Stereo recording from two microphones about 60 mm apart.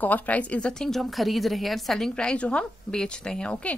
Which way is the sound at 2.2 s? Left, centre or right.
Centre.